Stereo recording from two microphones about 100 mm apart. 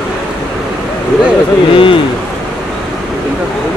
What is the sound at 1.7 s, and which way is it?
Speech, 60° left (ahead or behind).